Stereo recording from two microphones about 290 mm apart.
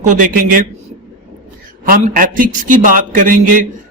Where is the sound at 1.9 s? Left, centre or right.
Right.